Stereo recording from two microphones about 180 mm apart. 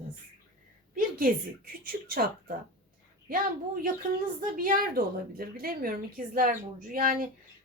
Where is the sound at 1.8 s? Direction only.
55° right (ahead or behind).